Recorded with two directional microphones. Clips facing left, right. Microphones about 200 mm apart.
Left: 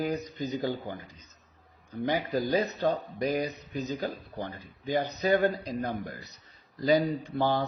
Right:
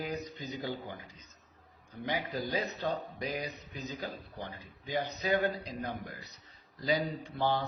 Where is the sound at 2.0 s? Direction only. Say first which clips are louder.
Left 7 dB; 45° left (ahead or behind).